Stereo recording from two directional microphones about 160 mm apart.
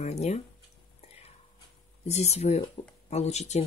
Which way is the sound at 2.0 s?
45° left (ahead or behind).